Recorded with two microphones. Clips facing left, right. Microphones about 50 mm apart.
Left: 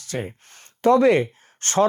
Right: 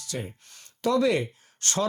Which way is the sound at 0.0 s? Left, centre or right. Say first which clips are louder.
Left 5 dB; left.